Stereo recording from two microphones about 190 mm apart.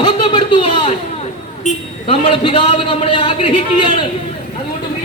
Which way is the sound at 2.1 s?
30° left (ahead or behind).